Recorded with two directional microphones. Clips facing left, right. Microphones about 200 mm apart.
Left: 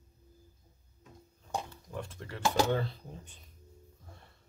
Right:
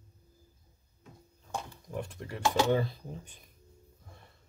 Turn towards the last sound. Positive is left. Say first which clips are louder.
# right 3 dB
turn(degrees=-15)  # may be behind; listen again after turning